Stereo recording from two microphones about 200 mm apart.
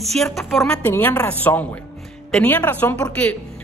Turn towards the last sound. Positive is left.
turn(degrees=10)  # may be behind; listen again after turning